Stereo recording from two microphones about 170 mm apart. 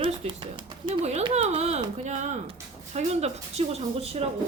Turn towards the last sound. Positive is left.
turn(degrees=-35)  # may be behind; listen again after turning